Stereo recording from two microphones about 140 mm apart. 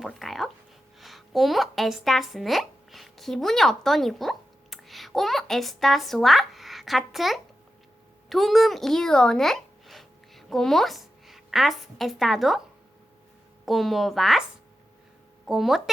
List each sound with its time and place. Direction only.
0.0 s a sound: centre (ahead or behind)
0.9 s speech: centre (ahead or behind)
13.7 s a woman's voice: centre (ahead or behind)
15.4 s a woman's voice: centre (ahead or behind)